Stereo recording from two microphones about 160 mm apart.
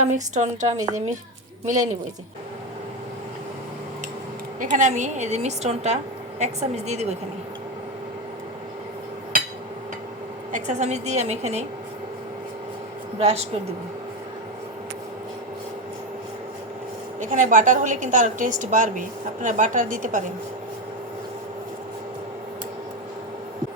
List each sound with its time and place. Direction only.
0.1 s a woman's voice: 50° right (ahead or behind)
4.6 s a woman's voice: 50° right (ahead or behind)
10.5 s a woman's voice: 45° right (ahead or behind)
13.1 s a woman's voice: 40° right (ahead or behind)
17.2 s a woman's voice: 50° right (ahead or behind)